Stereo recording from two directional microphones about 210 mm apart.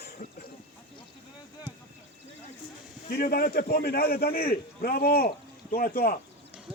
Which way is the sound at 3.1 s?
45° left (ahead or behind).